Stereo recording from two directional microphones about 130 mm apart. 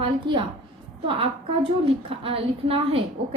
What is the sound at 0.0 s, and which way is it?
A woman's voice, 40° right (ahead or behind).